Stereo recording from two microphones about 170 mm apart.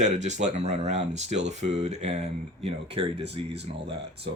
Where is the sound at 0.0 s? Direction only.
45° right (ahead or behind).